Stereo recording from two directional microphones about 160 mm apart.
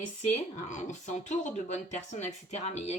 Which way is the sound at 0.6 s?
50° left (ahead or behind).